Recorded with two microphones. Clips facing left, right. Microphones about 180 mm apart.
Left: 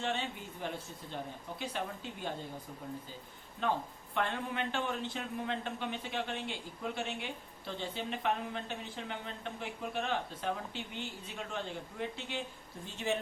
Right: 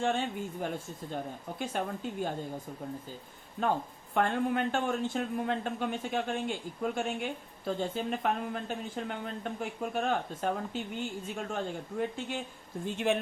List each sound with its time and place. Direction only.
0.0 s speech: 50° right (ahead or behind)
3.6 s speech: 45° right (ahead or behind)